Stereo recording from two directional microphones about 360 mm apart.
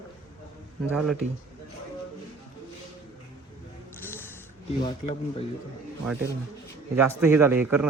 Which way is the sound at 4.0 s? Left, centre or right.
Centre.